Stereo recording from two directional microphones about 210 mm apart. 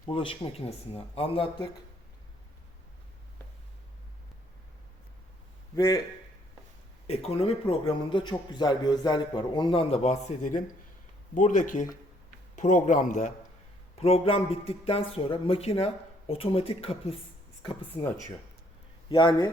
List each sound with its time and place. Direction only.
0.0 s a man's voice: 25° left (ahead or behind)
5.7 s a man's voice: 15° left (ahead or behind)
7.1 s a man's voice: 30° left (ahead or behind)
19.0 s speech: 20° left (ahead or behind)